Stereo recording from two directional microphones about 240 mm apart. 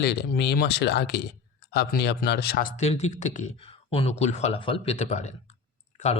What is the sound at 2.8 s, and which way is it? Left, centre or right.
Speech, left.